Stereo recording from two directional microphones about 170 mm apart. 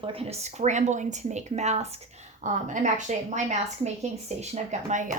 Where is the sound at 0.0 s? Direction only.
35° right (ahead or behind).